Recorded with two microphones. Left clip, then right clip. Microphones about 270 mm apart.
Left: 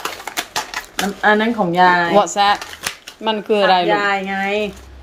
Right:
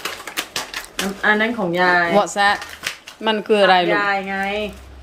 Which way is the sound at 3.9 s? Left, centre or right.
Left.